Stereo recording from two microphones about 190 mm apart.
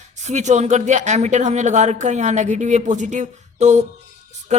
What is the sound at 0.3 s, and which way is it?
A woman's voice, 40° right (ahead or behind).